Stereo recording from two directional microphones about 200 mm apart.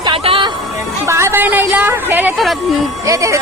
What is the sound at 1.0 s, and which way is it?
A woman's voice, 15° right (ahead or behind).